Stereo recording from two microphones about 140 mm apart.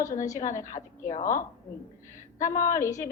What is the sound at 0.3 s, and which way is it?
A woman's voice, 65° left (ahead or behind).